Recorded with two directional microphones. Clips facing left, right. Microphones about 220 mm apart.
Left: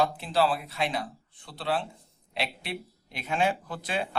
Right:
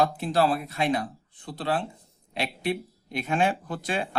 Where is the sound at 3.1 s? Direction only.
50° right (ahead or behind).